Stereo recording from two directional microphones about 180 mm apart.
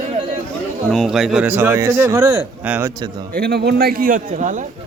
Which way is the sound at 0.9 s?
Centre (ahead or behind).